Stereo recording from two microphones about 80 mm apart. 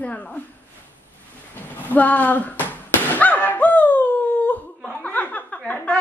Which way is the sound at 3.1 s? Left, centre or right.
Left.